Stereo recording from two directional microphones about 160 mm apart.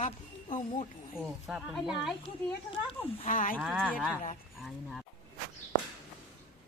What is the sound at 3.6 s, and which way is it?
A woman's voice, centre (ahead or behind).